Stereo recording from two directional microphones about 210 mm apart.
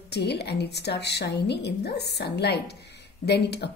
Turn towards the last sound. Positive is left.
turn(degrees=50)  # may be behind; listen again after turning